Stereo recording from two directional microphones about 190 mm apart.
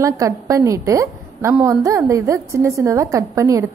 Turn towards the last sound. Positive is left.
turn(degrees=-15)  # may be behind; listen again after turning